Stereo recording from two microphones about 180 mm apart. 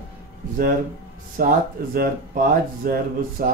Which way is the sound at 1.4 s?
50° right (ahead or behind).